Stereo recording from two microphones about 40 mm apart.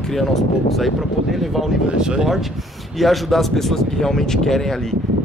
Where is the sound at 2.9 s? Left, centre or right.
Centre.